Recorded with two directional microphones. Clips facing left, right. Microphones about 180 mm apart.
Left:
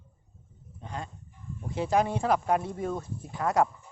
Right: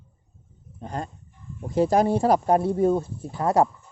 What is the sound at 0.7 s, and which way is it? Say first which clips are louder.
Speech: right 6 dB; 45° right (ahead or behind).